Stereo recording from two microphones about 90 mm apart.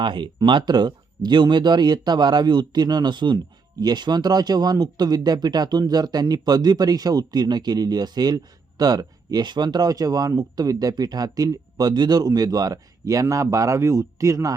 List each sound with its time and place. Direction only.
0.0 s speech: 65° right (ahead or behind); by 14.5 s 35° right (ahead or behind)